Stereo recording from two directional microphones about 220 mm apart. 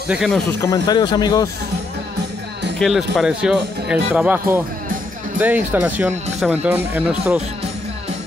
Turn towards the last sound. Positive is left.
turn(degrees=-5)  # may be behind; listen again after turning